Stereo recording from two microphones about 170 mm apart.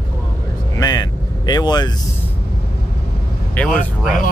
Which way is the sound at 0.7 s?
20° left (ahead or behind).